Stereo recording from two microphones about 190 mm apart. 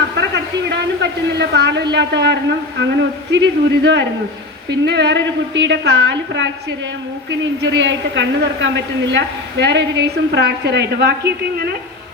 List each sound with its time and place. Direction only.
0.2 s a woman's voice: 65° right (ahead or behind)